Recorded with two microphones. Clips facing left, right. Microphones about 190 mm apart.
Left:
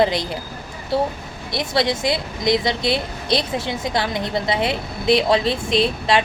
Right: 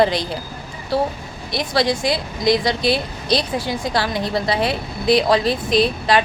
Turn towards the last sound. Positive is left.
turn(degrees=25)  # may be behind; listen again after turning